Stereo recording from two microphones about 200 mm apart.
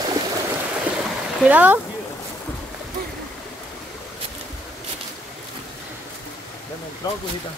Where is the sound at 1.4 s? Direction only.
5° right (ahead or behind).